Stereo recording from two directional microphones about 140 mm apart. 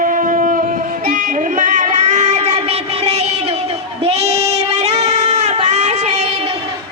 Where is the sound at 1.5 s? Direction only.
65° right (ahead or behind).